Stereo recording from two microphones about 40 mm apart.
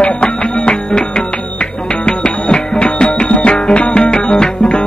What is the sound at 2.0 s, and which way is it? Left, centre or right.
Music, left.